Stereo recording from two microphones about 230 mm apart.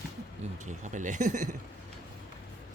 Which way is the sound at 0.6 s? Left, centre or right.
Right.